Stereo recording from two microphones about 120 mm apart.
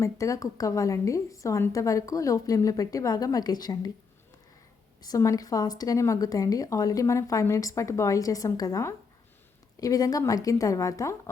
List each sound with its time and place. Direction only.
0.0 s a woman's voice: 25° left (ahead or behind)
5.0 s a woman's voice: 30° left (ahead or behind)